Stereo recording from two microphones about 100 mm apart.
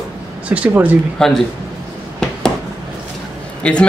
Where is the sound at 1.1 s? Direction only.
5° left (ahead or behind).